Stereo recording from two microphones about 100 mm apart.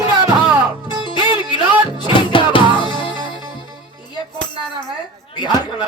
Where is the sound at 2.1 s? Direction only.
60° left (ahead or behind).